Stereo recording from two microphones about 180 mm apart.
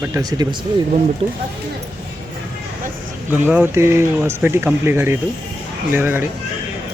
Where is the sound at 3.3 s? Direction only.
10° right (ahead or behind).